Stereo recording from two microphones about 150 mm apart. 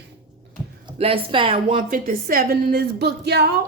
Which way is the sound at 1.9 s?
70° right (ahead or behind).